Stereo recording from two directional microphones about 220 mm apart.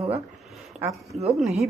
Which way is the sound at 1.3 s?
Centre (ahead or behind).